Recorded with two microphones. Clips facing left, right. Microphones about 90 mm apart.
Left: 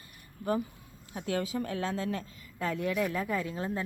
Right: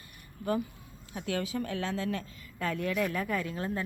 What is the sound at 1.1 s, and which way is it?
Speech, 30° left (ahead or behind).